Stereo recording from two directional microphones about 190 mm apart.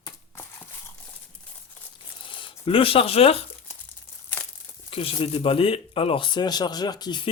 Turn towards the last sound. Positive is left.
turn(degrees=20)  # may be behind; listen again after turning